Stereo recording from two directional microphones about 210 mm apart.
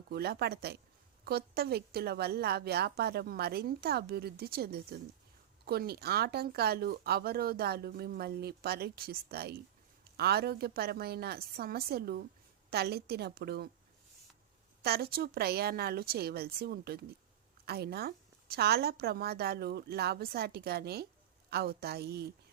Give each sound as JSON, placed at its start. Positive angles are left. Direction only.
{"t": 0.1, "sound": "speech", "side_deg": -50}
{"t": 14.8, "sound": "speech", "side_deg": -50}